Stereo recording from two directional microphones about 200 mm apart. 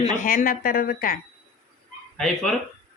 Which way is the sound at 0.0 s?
40° left (ahead or behind).